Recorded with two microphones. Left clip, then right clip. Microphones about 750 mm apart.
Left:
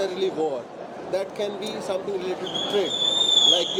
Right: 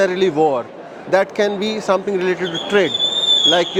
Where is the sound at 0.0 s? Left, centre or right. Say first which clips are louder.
Right 10 dB; right.